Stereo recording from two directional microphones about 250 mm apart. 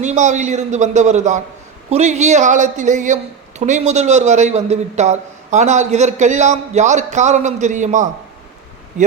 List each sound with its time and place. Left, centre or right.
0.0 s a man's voice: right